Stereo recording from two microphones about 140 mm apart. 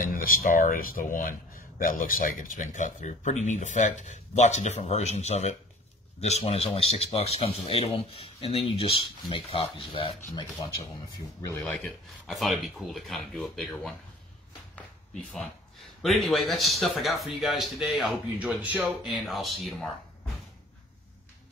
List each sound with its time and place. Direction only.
0.0 s speech: 90° left; by 10.5 s 35° left (ahead or behind)
11.7 s speech: 5° left (ahead or behind)
15.3 s speech: centre (ahead or behind)
18.9 s speech: centre (ahead or behind)